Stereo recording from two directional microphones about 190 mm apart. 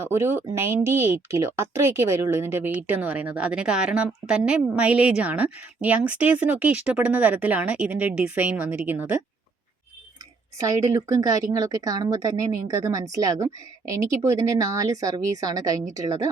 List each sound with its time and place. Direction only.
0.0 s speech: 10° right (ahead or behind)
10.6 s a woman's voice: 15° right (ahead or behind)